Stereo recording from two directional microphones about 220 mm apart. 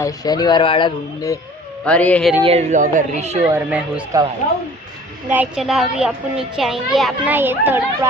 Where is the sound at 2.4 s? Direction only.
30° right (ahead or behind).